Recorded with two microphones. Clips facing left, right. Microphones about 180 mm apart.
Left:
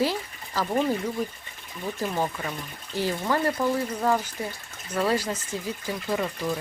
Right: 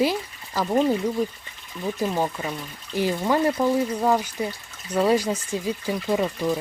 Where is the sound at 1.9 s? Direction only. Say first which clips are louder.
Right 3 dB; 15° right (ahead or behind).